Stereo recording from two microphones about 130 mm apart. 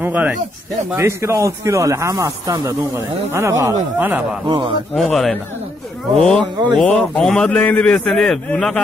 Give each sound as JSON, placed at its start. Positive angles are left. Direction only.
{"t": 0.0, "sound": "speech", "side_deg": -15}
{"t": 4.5, "sound": "a man's voice", "side_deg": -35}
{"t": 4.9, "sound": "a man's voice", "side_deg": 0}